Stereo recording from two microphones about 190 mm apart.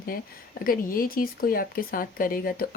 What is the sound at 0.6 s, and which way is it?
Speech, 50° left (ahead or behind).